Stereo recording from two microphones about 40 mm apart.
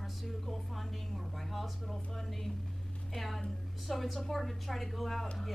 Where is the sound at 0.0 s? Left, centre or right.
Centre.